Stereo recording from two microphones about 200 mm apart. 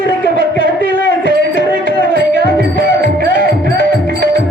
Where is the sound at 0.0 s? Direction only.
60° left (ahead or behind).